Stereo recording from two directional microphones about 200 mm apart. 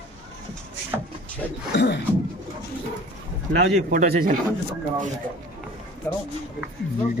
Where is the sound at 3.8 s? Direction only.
40° right (ahead or behind).